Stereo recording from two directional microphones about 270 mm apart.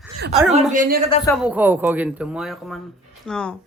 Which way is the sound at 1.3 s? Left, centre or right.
Centre.